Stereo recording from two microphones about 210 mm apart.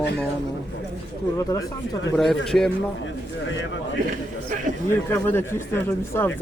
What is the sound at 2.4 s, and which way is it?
Speech, 5° left (ahead or behind).